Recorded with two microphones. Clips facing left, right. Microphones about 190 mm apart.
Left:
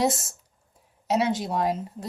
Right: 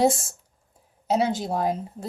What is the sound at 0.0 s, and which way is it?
Speech, 30° right (ahead or behind).